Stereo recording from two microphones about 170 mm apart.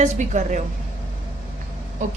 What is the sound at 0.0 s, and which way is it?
Speech, 45° right (ahead or behind).